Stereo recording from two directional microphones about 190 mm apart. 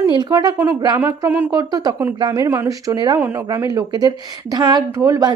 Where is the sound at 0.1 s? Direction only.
20° right (ahead or behind).